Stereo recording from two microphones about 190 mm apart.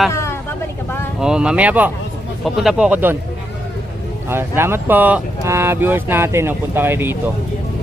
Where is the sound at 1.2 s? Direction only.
5° right (ahead or behind).